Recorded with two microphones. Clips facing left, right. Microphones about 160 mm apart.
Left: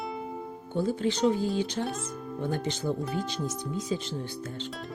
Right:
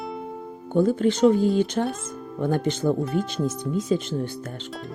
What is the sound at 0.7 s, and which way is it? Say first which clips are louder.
Speech: right 8 dB; 50° right (ahead or behind).